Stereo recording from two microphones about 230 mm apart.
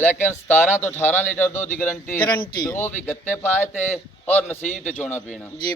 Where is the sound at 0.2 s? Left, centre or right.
Centre.